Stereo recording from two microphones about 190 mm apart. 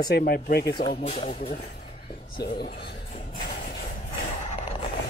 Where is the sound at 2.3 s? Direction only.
55° left (ahead or behind).